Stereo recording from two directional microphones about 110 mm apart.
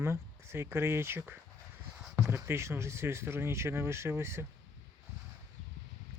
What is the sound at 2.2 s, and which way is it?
Speech, 25° right (ahead or behind).